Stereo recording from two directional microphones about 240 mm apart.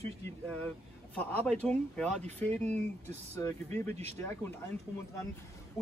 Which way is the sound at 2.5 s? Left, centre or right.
Right.